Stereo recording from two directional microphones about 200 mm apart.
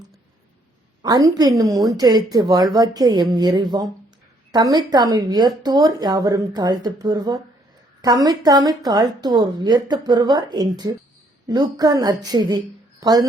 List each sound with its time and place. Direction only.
1.0 s a woman's voice: 20° right (ahead or behind)